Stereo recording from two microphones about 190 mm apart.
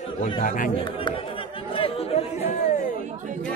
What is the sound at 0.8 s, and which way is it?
Chatter, 25° left (ahead or behind).